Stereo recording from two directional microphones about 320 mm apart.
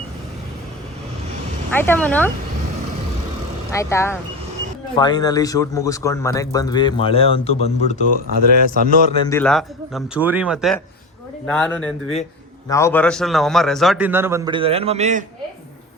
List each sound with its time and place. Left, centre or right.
1.7 s a man's voice: centre
3.7 s speech: centre
8.3 s a man's voice: right
9.2 s a man's voice: centre; by 15.2 s right